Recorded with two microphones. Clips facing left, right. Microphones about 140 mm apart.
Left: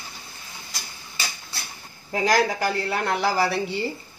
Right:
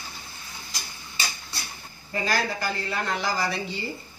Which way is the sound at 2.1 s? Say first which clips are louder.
Left 6 dB; 75° left (ahead or behind).